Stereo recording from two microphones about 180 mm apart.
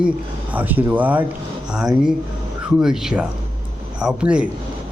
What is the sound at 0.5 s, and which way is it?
A man's voice, 10° right (ahead or behind).